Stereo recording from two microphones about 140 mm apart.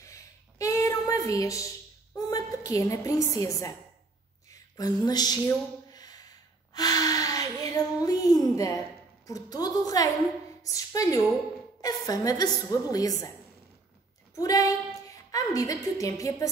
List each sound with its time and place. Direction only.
0.0 s a sound: 25° left (ahead or behind)
3.3 s a woman's voice: 25° left (ahead or behind)
4.7 s a woman's voice: 30° left (ahead or behind)
5.9 s a sound: 30° left (ahead or behind)
9.2 s a woman's voice: 25° left (ahead or behind)
14.3 s a woman's voice: 25° left (ahead or behind)